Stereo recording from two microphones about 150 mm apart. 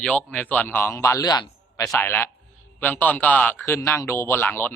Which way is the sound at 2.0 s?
15° left (ahead or behind).